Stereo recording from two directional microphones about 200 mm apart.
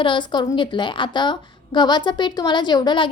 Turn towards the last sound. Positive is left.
turn(degrees=20)  # may be behind; listen again after turning